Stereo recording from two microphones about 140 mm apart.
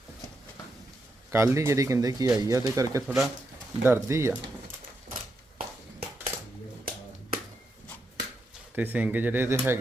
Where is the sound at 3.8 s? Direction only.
20° right (ahead or behind).